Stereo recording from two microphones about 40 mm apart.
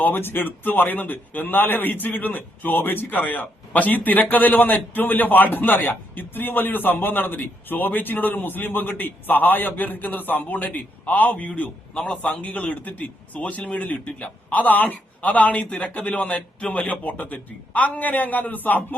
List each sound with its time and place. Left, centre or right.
0.0 s a man's voice: left